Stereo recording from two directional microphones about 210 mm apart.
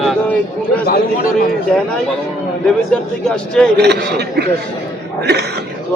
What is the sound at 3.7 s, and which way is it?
A man's voice, 50° right (ahead or behind).